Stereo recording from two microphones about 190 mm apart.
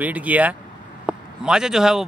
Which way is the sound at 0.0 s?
10° right (ahead or behind).